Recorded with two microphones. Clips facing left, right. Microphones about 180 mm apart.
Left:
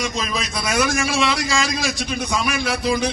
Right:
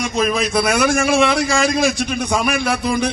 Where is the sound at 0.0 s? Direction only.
55° right (ahead or behind).